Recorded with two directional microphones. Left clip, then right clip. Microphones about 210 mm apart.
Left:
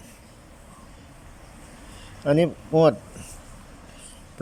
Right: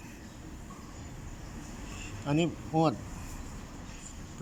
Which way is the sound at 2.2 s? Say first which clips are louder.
Left 10 dB; 25° left (ahead or behind).